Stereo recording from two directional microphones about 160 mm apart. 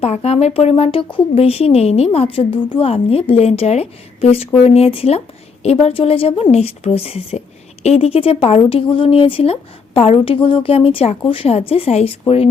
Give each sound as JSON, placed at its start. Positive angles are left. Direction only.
{"t": 0.0, "sound": "a woman's voice", "side_deg": 40}